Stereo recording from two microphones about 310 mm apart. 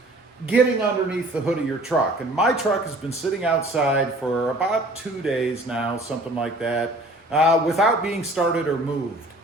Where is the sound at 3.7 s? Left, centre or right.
Centre.